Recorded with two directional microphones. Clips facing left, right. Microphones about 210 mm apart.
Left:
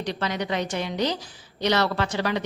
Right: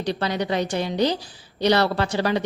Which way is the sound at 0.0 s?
35° right (ahead or behind).